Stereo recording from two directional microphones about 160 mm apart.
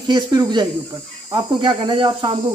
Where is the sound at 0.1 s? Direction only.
25° right (ahead or behind).